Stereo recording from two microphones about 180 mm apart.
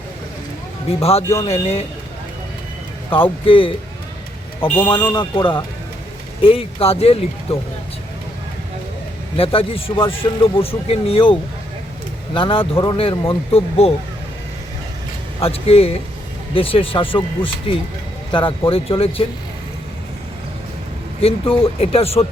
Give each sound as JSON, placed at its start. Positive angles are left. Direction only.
{"t": 0.9, "sound": "a man's voice", "side_deg": 35}
{"t": 3.1, "sound": "speech", "side_deg": 30}
{"t": 4.6, "sound": "speech", "side_deg": 10}
{"t": 5.1, "sound": "a man's voice", "side_deg": 25}
{"t": 9.4, "sound": "a man's voice", "side_deg": 30}
{"t": 15.4, "sound": "a man's voice", "side_deg": 35}
{"t": 21.2, "sound": "a man's voice", "side_deg": 30}